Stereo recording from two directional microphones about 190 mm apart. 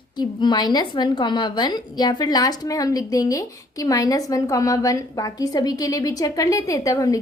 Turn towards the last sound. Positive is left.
turn(degrees=20)  # may be behind; listen again after turning